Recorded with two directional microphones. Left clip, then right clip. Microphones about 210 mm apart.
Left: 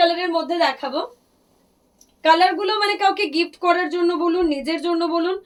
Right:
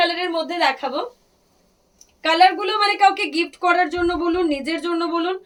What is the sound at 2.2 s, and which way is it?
A woman's voice, 20° right (ahead or behind).